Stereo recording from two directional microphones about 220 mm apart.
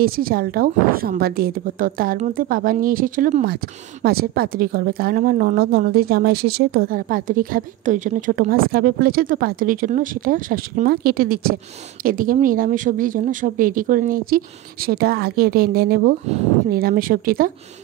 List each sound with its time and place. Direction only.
0.0 s a woman's voice: 40° right (ahead or behind)